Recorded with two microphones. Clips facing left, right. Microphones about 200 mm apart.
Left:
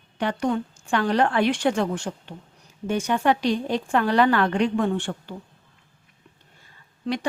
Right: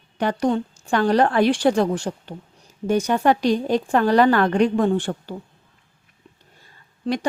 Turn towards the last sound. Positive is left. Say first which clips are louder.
# right 3 dB
turn(degrees=-40)  # may be behind; listen again after turning